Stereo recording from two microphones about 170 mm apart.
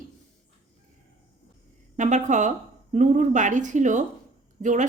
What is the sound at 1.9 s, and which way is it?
Speech, 45° right (ahead or behind).